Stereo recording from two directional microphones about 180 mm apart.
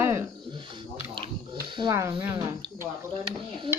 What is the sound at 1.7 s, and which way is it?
Speech, 25° right (ahead or behind).